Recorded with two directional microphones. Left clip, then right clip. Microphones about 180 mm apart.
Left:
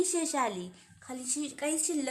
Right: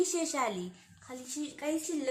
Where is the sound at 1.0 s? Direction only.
65° left (ahead or behind).